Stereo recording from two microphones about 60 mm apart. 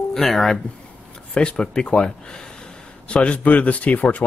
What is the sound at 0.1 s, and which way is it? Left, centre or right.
Speech, centre.